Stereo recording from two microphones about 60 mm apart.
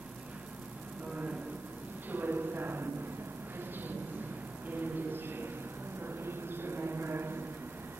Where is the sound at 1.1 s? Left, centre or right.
Right.